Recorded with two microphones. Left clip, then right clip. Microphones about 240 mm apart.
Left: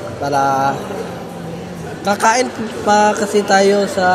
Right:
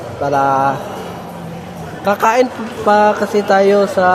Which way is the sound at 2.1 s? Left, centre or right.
Centre.